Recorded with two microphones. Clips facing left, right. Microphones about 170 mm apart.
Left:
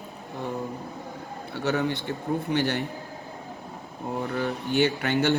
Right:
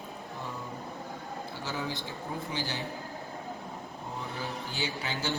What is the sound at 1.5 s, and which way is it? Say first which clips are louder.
A man's voice: left 11 dB; 65° left (ahead or behind).